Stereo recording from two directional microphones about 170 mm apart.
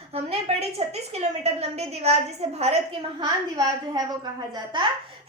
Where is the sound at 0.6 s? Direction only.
40° right (ahead or behind).